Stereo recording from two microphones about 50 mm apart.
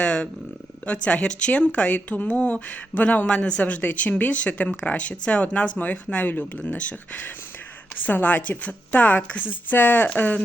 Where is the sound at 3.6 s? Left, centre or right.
Left.